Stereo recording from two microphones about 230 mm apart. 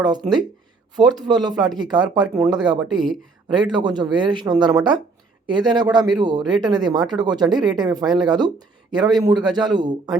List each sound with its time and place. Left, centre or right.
0.0 s speech: centre